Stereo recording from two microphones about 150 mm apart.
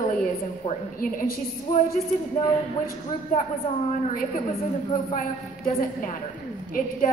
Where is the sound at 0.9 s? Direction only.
75° left (ahead or behind).